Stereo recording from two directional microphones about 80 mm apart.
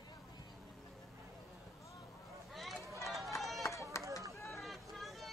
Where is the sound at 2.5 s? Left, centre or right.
Centre.